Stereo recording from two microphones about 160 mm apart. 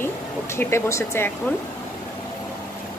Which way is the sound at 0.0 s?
15° left (ahead or behind).